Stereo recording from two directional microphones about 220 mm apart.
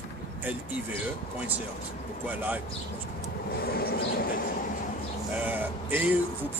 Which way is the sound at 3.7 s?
45° left (ahead or behind).